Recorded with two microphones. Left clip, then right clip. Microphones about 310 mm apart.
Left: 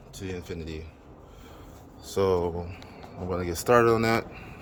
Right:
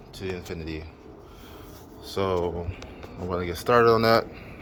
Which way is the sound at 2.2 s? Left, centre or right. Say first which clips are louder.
Left 1 dB; centre.